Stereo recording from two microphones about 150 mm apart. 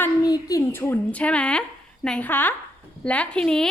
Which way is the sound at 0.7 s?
15° left (ahead or behind).